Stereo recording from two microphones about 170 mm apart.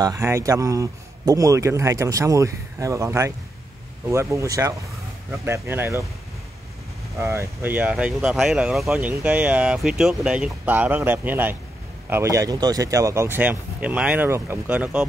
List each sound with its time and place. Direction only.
0.0 s speech: 20° right (ahead or behind)
7.2 s speech: 15° right (ahead or behind)